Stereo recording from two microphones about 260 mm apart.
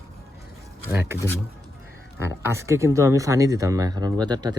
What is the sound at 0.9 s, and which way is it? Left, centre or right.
Speech, centre.